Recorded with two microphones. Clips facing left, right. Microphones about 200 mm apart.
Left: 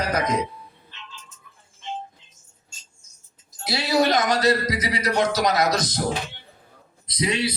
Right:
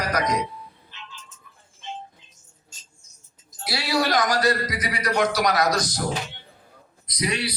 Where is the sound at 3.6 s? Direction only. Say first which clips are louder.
Left 3 dB; 20° left (ahead or behind).